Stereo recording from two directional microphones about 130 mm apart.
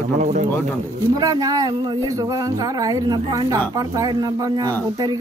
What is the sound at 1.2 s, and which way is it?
Speech, 30° right (ahead or behind).